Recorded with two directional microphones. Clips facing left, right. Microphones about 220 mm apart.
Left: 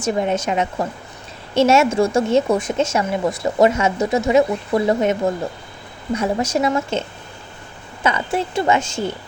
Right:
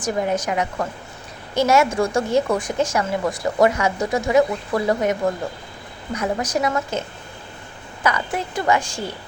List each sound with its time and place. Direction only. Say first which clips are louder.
0.0 s a woman's voice: left 2 dB; 25° left (ahead or behind)
6.1 s a woman's voice: left 3 dB; 25° left (ahead or behind)
8.0 s a woman's voice: left 3 dB; 25° left (ahead or behind)